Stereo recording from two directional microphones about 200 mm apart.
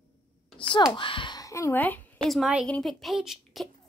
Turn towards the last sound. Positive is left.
turn(degrees=0)  # may be behind; listen again after turning